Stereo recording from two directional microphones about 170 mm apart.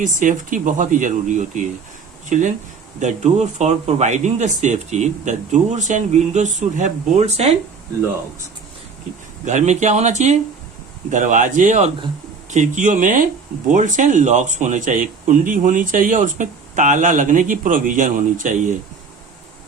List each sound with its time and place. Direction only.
0.2 s speech: 50° right (ahead or behind)
9.5 s speech: 45° right (ahead or behind)